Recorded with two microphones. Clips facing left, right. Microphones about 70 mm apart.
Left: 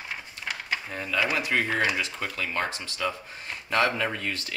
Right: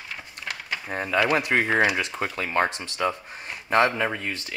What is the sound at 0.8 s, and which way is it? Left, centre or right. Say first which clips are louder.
Speech: right 6 dB; right.